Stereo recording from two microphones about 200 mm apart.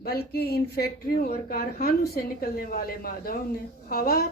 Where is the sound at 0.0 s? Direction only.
50° left (ahead or behind).